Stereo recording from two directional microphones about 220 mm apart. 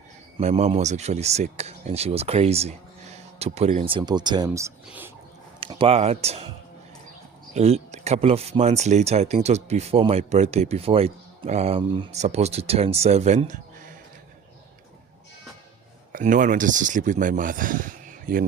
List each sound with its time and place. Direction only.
0.3 s speech: 30° right (ahead or behind); by 5.1 s 10° right (ahead or behind)
5.5 s speech: 25° right (ahead or behind)
7.5 s speech: 30° right (ahead or behind)
16.1 s speech: 35° right (ahead or behind)